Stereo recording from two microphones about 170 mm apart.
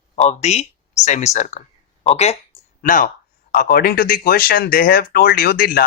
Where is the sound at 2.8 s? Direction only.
50° left (ahead or behind).